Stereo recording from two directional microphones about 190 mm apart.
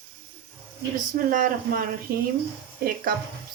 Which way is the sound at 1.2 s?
45° right (ahead or behind).